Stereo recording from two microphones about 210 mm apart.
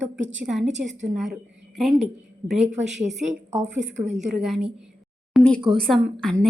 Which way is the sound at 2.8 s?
35° right (ahead or behind).